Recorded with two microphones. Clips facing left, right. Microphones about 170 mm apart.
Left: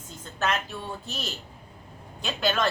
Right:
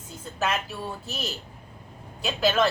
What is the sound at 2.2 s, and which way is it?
Speech, 5° right (ahead or behind).